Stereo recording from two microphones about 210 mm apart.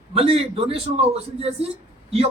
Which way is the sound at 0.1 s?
25° right (ahead or behind).